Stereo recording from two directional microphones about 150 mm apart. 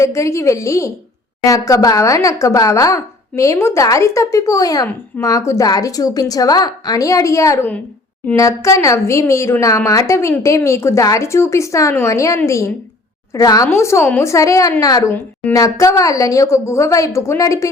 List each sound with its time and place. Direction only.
0.0 s a woman's voice: 20° left (ahead or behind)
15.1 s a woman's voice: 10° left (ahead or behind)
15.5 s a woman's voice: 20° left (ahead or behind)